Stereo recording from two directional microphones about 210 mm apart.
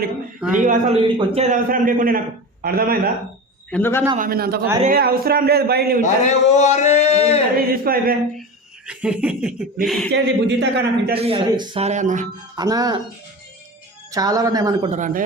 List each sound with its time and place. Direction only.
0.3 s speech: 5° right (ahead or behind)
0.6 s a man's voice: 40° right (ahead or behind)
1.0 s speech: 25° right (ahead or behind)
1.5 s a man's voice: 40° right (ahead or behind)
3.7 s a man's voice: 10° left (ahead or behind)
4.2 s a man's voice: 45° right (ahead or behind)
6.0 s a man's voice: 35° left (ahead or behind)
7.7 s a man's voice: 45° right (ahead or behind)
8.9 s speech: 5° right (ahead or behind)
10.1 s a man's voice: 55° right (ahead or behind)
11.2 s speech: 25° right (ahead or behind)
12.5 s speech: 15° right (ahead or behind)
14.1 s speech: 15° right (ahead or behind)
14.8 s a man's voice: 35° right (ahead or behind)